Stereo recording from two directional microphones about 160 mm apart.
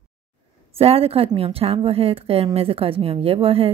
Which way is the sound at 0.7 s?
40° right (ahead or behind).